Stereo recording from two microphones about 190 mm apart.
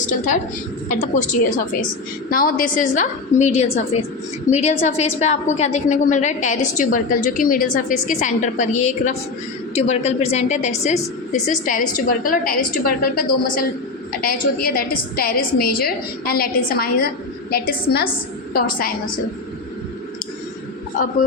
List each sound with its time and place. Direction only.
0.9 s a woman's voice: 40° left (ahead or behind)